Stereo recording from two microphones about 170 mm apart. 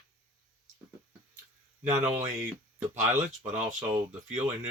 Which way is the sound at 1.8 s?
15° right (ahead or behind).